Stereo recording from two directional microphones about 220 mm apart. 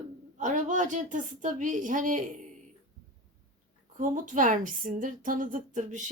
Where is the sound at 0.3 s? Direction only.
35° right (ahead or behind).